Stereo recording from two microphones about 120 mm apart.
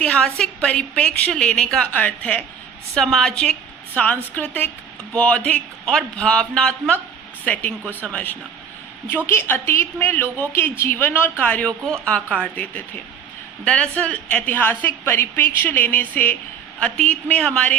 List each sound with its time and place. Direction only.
0.0 s a woman's voice: 10° left (ahead or behind)